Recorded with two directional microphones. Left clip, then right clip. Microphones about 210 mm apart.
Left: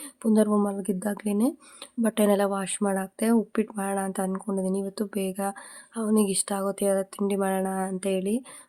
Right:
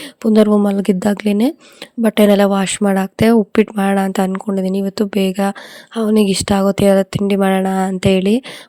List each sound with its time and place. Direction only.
0.2 s speech: 35° right (ahead or behind)